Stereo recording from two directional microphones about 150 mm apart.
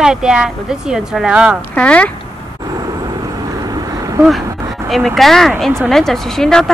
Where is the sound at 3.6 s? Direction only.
25° right (ahead or behind).